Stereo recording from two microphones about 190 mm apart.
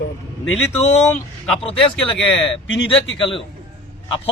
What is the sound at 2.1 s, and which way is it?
Speech, 5° left (ahead or behind).